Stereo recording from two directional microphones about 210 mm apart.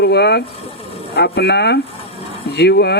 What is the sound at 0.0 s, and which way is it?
Speech, 55° left (ahead or behind).